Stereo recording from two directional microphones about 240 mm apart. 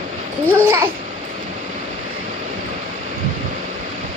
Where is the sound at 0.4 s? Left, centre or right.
Centre.